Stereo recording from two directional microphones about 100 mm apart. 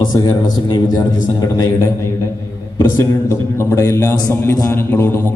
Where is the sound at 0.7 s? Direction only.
40° left (ahead or behind).